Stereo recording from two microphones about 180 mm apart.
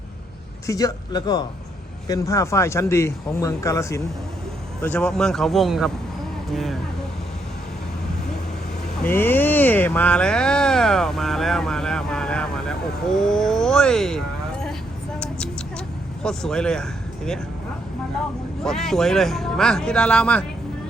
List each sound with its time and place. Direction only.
0.7 s speech: 20° left (ahead or behind); by 6.7 s centre (ahead or behind)
9.0 s speech: 10° left (ahead or behind)
16.2 s speech: 5° left (ahead or behind)
18.6 s speech: centre (ahead or behind)